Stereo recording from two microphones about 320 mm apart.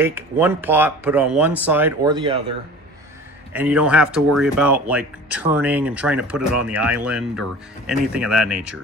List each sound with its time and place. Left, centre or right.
0.0 s speech: centre
3.5 s speech: centre